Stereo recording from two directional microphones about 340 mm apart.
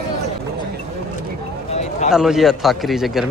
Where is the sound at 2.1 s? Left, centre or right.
Centre.